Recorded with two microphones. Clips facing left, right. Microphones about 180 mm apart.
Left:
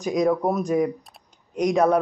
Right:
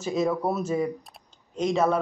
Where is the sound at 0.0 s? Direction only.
15° left (ahead or behind).